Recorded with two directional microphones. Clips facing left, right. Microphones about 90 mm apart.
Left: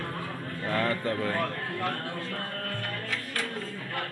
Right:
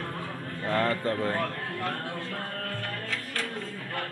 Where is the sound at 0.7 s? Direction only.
35° right (ahead or behind).